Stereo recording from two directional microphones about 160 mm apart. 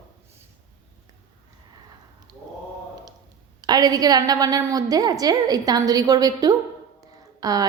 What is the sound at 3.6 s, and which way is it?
A woman's voice, 25° right (ahead or behind).